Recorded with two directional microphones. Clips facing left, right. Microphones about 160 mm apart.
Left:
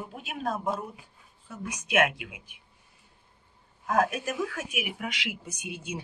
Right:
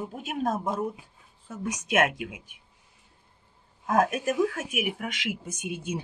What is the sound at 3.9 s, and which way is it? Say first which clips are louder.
Speech: right 2 dB; 50° right (ahead or behind).